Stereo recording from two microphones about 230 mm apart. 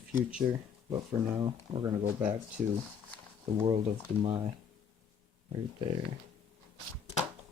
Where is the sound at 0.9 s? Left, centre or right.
Centre.